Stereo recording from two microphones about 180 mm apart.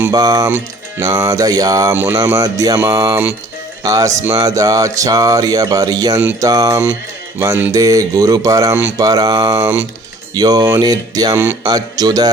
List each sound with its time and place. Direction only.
0.1 s speech: 20° right (ahead or behind)